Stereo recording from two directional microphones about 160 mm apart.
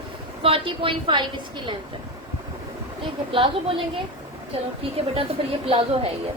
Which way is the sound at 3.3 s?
35° right (ahead or behind).